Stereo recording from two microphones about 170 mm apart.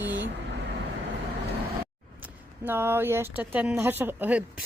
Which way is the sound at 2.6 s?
10° right (ahead or behind).